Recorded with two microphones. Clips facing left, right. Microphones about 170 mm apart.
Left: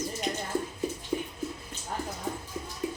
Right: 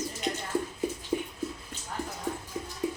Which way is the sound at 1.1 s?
20° right (ahead or behind).